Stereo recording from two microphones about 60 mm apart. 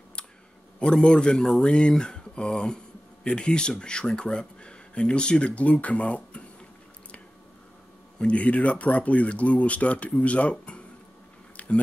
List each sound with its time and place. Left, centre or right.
0.7 s speech: centre
8.2 s speech: left
11.5 s a sound: left